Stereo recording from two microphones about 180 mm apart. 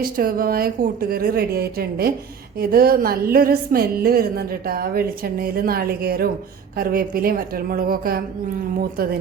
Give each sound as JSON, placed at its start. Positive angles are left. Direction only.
{"t": 0.0, "sound": "a woman's voice", "side_deg": -55}